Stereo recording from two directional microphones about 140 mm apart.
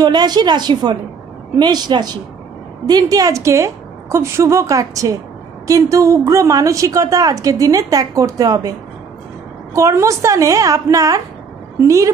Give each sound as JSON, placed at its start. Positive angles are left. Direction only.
{"t": 0.0, "sound": "a woman's voice", "side_deg": -30}
{"t": 9.8, "sound": "a woman's voice", "side_deg": -20}